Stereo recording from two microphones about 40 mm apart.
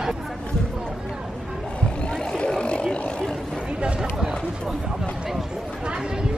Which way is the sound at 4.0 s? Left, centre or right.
Centre.